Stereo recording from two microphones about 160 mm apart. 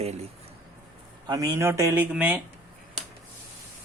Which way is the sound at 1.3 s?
20° right (ahead or behind).